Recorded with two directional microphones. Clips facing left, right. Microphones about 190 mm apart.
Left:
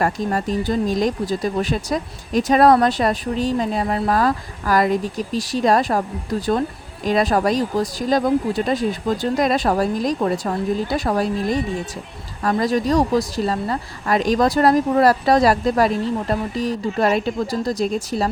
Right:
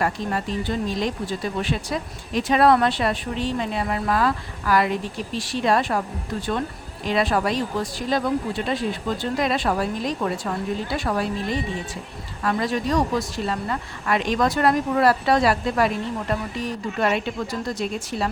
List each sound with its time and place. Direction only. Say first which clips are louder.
0.0 s speech: left 4 dB; 40° left (ahead or behind)